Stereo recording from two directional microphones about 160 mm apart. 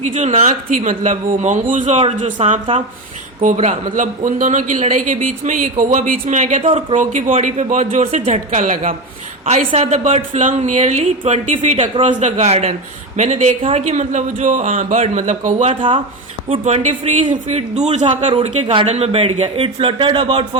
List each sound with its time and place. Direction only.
0.0 s a man's voice: 50° right (ahead or behind)
3.4 s a man's voice: 50° right (ahead or behind)
6.6 s speech: 35° right (ahead or behind)
6.9 s a man's voice: 50° right (ahead or behind); by 20.6 s 30° right (ahead or behind)